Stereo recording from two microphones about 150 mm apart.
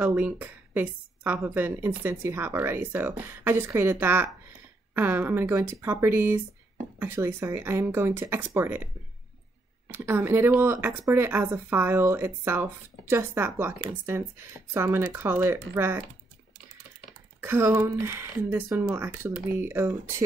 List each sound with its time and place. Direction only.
0.0 s speech: 10° right (ahead or behind)
9.9 s speech: 15° right (ahead or behind)
17.4 s speech: 15° right (ahead or behind)